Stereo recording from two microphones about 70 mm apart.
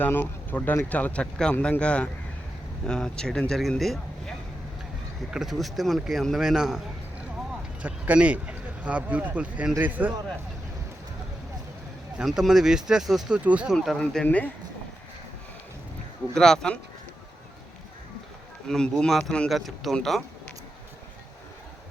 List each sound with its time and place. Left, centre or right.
0.0 s speech: left; by 6.8 s centre
7.8 s speech: centre
12.2 s speech: centre
13.4 s speech: centre
14.0 s speech: centre
14.3 s speech: left
16.3 s speech: centre
18.7 s speech: centre
19.5 s speech: centre